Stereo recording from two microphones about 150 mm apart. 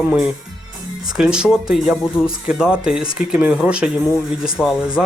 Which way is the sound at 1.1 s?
5° right (ahead or behind).